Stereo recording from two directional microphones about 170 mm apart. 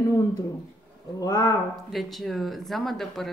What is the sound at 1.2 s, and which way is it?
Speech, 20° left (ahead or behind).